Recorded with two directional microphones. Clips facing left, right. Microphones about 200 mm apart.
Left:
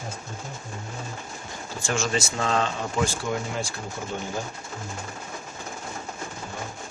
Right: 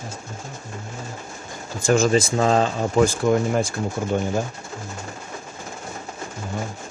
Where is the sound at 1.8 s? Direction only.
40° right (ahead or behind).